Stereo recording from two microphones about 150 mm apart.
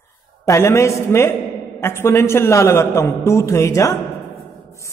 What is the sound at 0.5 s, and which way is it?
A man's voice, 20° left (ahead or behind).